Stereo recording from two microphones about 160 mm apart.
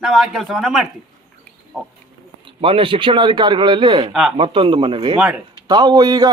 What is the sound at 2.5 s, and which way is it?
A man's voice, 35° right (ahead or behind).